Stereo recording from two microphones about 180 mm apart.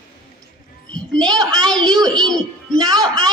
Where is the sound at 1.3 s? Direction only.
20° right (ahead or behind).